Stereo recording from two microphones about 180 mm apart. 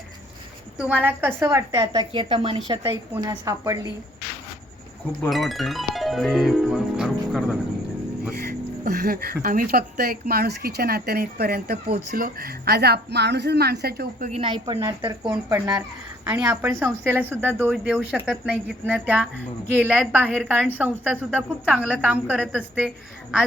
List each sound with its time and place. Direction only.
1.0 s a woman's voice: 15° right (ahead or behind)
5.3 s speech: centre (ahead or behind)
8.4 s speech: 55° right (ahead or behind)
14.3 s a woman's voice: 30° right (ahead or behind); by 22.9 s 5° right (ahead or behind)